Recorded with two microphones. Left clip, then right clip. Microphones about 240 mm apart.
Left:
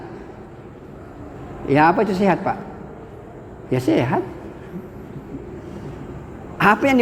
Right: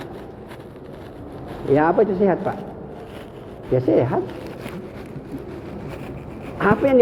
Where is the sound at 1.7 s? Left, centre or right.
Left.